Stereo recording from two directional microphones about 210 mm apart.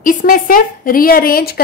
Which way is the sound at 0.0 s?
40° left (ahead or behind).